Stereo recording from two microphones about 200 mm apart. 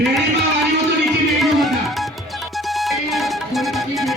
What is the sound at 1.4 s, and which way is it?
Music, centre (ahead or behind).